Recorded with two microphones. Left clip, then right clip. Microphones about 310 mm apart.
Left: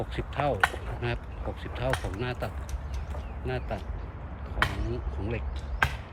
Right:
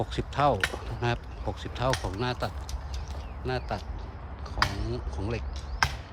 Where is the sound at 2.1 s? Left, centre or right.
Centre.